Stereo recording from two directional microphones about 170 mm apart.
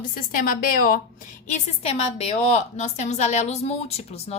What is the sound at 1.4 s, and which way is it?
A woman's voice, 40° left (ahead or behind).